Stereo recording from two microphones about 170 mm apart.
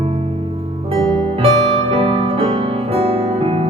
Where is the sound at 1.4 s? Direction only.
35° right (ahead or behind).